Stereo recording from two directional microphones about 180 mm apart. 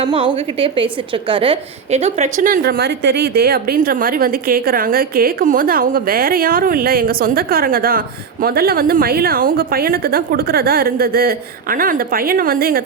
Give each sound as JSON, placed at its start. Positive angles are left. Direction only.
{"t": 0.0, "sound": "a woman's voice", "side_deg": -25}